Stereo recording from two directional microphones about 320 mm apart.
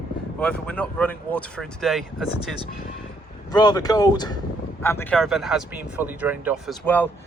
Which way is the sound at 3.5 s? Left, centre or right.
Centre.